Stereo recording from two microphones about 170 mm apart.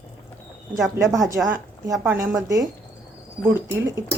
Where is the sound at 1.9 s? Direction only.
15° right (ahead or behind).